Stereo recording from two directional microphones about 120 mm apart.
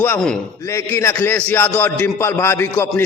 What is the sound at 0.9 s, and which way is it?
A man's voice, 20° left (ahead or behind).